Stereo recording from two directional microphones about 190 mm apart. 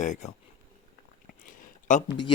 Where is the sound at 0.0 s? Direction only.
40° left (ahead or behind).